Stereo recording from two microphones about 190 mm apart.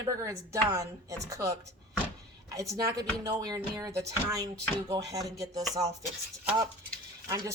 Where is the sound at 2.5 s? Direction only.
15° right (ahead or behind).